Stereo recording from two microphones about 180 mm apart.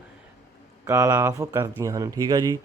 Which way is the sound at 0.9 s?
15° right (ahead or behind).